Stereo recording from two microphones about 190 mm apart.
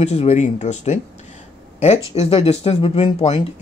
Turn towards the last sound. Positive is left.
turn(degrees=30)  # may be behind; listen again after turning